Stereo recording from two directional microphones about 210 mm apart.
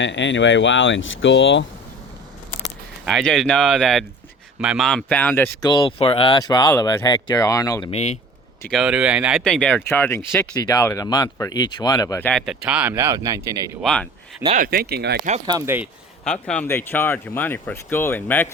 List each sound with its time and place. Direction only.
0.0 s speech: 60° left (ahead or behind)
3.1 s speech: centre (ahead or behind)
5.6 s speech: 20° left (ahead or behind)
7.9 s speech: 30° left (ahead or behind)
8.6 s speech: centre (ahead or behind); by 12.3 s 15° left (ahead or behind)
12.3 s speech: centre (ahead or behind); by 13.7 s 15° right (ahead or behind)
13.8 s speech: 5° left (ahead or behind)
14.4 s speech: 35° right (ahead or behind)
15.4 s speech: 15° right (ahead or behind)
16.2 s speech: 5° left (ahead or behind)